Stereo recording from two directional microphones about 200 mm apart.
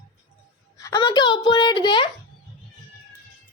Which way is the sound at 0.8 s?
15° left (ahead or behind).